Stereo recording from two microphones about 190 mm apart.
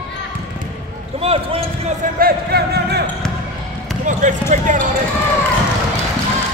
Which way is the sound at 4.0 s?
40° right (ahead or behind).